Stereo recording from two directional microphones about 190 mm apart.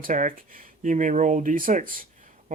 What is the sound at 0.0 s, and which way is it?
Speech, 45° right (ahead or behind).